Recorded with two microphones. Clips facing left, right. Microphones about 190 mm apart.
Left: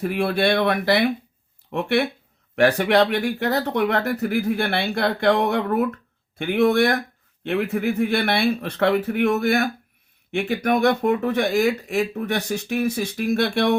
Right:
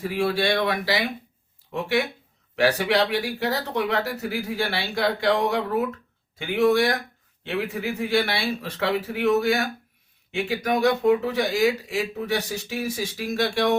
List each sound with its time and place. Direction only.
0.0 s speech: 55° left (ahead or behind)